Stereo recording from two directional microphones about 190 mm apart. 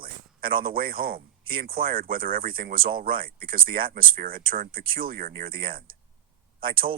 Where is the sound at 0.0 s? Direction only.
50° right (ahead or behind).